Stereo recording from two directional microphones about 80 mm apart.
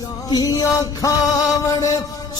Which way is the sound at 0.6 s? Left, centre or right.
Left.